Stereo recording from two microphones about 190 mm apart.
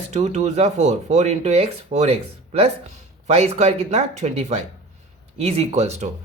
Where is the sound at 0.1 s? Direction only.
35° right (ahead or behind).